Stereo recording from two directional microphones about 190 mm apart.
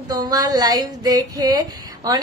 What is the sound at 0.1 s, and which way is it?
Speech, 20° right (ahead or behind).